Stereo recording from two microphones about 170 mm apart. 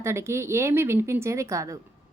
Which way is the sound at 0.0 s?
15° right (ahead or behind).